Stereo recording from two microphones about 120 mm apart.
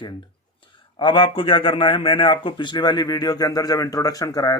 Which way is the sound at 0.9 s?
45° left (ahead or behind).